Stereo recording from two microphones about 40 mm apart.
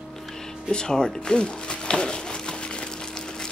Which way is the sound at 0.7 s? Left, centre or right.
Centre.